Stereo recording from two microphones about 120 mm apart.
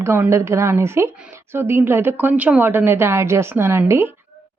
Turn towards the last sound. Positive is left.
turn(degrees=-20)  # may be behind; listen again after turning